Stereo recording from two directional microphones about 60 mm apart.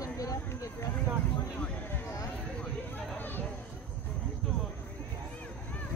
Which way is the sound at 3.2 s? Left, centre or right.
Left.